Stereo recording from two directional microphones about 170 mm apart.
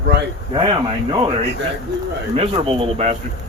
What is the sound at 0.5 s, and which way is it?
Speech, 30° right (ahead or behind).